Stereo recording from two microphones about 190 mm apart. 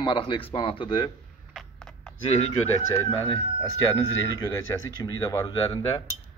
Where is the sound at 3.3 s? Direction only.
15° left (ahead or behind).